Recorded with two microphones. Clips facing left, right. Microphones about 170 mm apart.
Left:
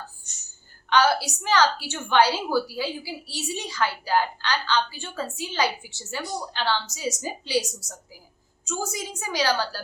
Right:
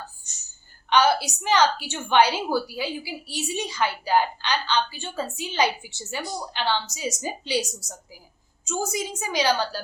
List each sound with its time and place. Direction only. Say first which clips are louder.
0.9 s a woman's voice: right 1 dB; 20° right (ahead or behind)